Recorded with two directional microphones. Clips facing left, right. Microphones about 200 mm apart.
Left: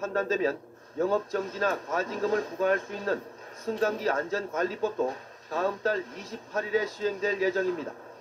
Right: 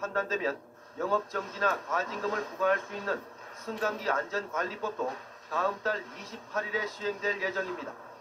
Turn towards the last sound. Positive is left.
turn(degrees=35)  # may be behind; listen again after turning